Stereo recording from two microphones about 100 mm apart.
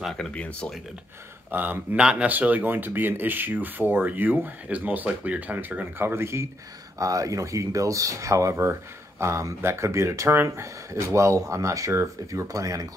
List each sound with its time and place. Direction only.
0.3 s speech: 10° left (ahead or behind)
1.5 s speech: 15° right (ahead or behind)